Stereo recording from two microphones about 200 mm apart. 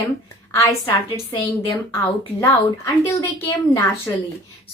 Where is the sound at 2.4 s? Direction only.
20° left (ahead or behind).